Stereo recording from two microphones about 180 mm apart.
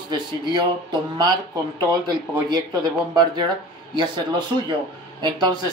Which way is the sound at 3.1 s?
25° right (ahead or behind).